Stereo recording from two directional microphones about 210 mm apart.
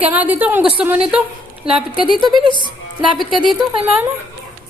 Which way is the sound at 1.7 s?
5° right (ahead or behind).